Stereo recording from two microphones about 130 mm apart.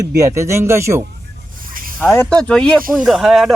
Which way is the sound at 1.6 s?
90° right.